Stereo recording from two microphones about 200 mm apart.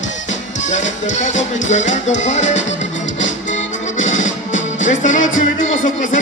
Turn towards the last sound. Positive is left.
turn(degrees=40)  # may be behind; listen again after turning